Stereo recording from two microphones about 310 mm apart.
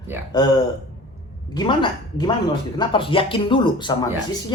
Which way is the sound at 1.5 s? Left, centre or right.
Centre.